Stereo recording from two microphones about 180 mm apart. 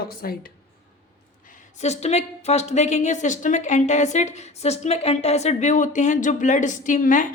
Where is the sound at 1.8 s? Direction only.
35° left (ahead or behind).